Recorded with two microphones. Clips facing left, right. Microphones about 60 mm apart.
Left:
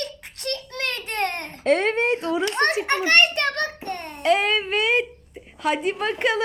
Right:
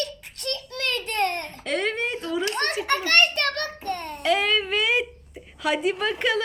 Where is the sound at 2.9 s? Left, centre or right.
Centre.